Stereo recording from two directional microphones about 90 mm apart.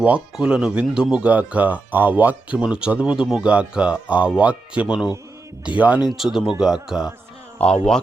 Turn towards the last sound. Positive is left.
turn(degrees=10)  # may be behind; listen again after turning